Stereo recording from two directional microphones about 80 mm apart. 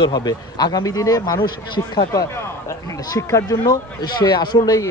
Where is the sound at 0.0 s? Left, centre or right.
Left.